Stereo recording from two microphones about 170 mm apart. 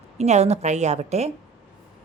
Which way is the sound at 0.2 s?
40° right (ahead or behind).